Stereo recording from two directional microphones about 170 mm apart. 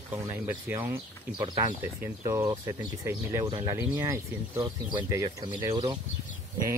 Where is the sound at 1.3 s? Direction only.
25° right (ahead or behind).